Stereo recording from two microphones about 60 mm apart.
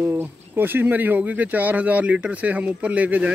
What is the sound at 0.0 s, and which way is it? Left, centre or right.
Speech, right.